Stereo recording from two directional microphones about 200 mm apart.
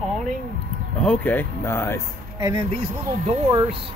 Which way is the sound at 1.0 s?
10° left (ahead or behind).